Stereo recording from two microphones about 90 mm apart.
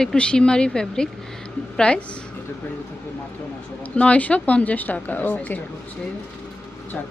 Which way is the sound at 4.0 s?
15° left (ahead or behind).